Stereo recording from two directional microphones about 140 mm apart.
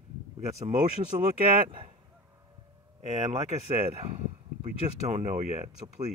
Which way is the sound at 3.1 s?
50° right (ahead or behind).